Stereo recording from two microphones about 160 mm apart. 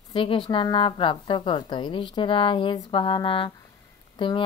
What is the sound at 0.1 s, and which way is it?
A woman's voice, 30° left (ahead or behind).